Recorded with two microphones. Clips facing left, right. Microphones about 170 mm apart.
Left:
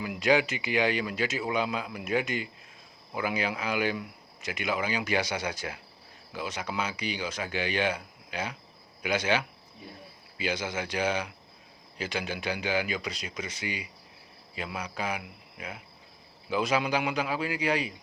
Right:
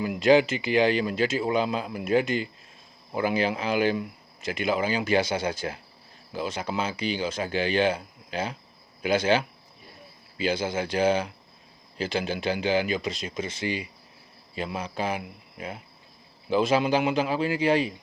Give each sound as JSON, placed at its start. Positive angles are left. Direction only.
{"t": 0.0, "sound": "speech", "side_deg": -30}